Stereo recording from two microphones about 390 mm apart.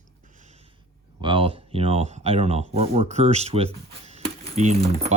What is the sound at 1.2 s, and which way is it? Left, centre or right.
Speech, centre.